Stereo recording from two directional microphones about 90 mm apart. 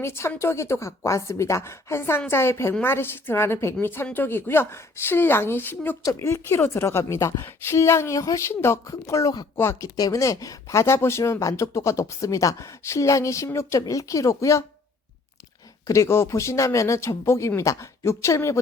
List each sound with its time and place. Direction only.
0.0 s a woman's voice: 30° left (ahead or behind)
15.9 s speech: 30° left (ahead or behind)